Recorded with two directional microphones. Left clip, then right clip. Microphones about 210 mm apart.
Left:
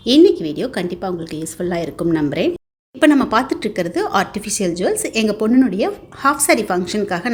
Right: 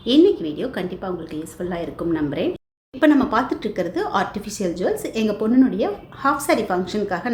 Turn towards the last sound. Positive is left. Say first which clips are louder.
# left 3 dB
turn(degrees=40)  # may be behind; listen again after turning